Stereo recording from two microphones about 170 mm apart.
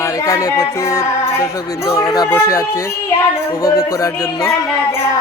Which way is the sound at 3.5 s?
20° left (ahead or behind).